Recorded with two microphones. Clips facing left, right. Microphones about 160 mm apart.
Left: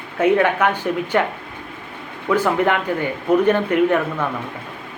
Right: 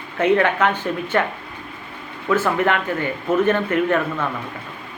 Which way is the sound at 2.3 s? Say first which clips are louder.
Left 1 dB; 15° left (ahead or behind).